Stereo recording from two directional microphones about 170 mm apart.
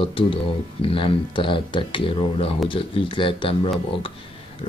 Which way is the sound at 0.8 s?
30° left (ahead or behind).